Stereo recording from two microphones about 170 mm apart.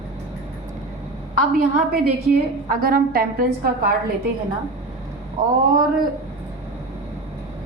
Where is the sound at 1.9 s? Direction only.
60° right (ahead or behind).